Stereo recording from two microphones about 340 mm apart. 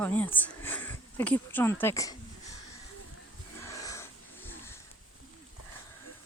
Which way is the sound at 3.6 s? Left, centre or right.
Centre.